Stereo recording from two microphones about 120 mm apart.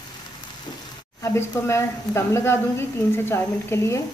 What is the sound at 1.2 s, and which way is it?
Speech, 20° left (ahead or behind).